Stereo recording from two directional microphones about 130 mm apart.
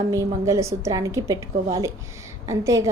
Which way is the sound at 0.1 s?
25° right (ahead or behind).